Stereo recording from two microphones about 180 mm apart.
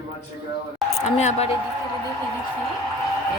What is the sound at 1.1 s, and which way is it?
Speech, 40° left (ahead or behind).